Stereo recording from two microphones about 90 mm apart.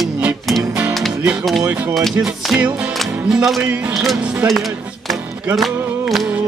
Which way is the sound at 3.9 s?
Centre (ahead or behind).